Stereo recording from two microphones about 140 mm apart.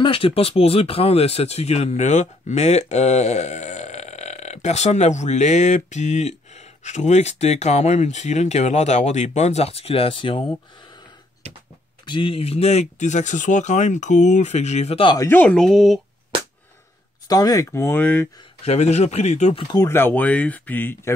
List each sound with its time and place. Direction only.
0.0 s speech: 40° left (ahead or behind)
12.1 s speech: 40° left (ahead or behind)
15.1 s speech: 15° left (ahead or behind)
17.3 s speech: 25° left (ahead or behind); by 18.3 s 10° left (ahead or behind)
18.6 s speech: 50° left (ahead or behind)
19.9 s speech: 15° left (ahead or behind)